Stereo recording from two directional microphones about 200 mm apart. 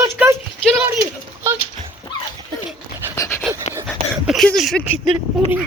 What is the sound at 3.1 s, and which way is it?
Pant, 15° left (ahead or behind).